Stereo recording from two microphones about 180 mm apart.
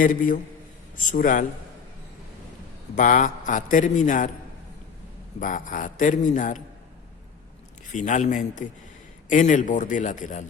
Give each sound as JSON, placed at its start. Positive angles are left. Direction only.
{"t": 0.0, "sound": "a man's voice", "side_deg": 50}
{"t": 2.9, "sound": "a man's voice", "side_deg": 45}
{"t": 5.4, "sound": "a man's voice", "side_deg": 45}
{"t": 7.9, "sound": "a man's voice", "side_deg": 45}